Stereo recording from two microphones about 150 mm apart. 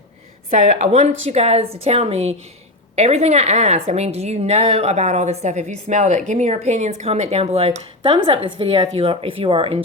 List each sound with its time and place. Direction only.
0.5 s a woman's voice: 50° right (ahead or behind)